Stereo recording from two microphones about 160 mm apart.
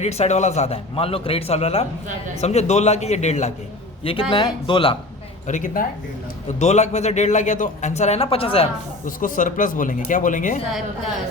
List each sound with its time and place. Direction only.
0.0 s a man's voice: 45° left (ahead or behind)
4.0 s a man's voice: 35° left (ahead or behind)
5.5 s a man's voice: 55° left (ahead or behind); by 8.7 s 35° left (ahead or behind)
9.0 s speech: 55° left (ahead or behind)